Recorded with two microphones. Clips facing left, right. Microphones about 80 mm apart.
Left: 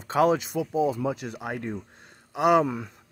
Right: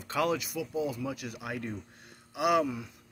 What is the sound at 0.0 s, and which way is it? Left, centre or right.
A man's voice, left.